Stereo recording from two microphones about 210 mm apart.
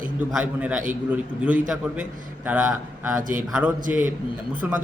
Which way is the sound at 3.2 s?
40° right (ahead or behind).